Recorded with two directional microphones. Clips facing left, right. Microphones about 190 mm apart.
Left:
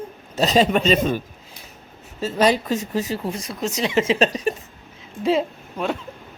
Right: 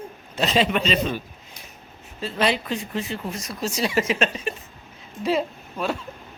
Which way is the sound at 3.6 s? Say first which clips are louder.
Left 2 dB; 20° left (ahead or behind).